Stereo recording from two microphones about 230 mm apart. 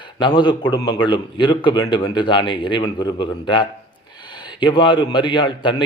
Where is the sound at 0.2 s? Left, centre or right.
Centre.